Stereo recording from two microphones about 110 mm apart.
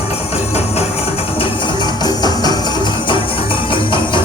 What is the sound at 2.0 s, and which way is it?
Music, 40° left (ahead or behind).